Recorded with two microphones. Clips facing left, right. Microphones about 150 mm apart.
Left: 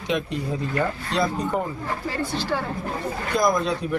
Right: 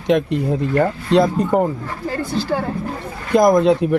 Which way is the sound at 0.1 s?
50° right (ahead or behind).